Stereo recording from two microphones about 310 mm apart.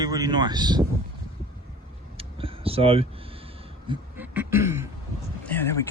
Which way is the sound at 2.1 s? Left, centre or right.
Centre.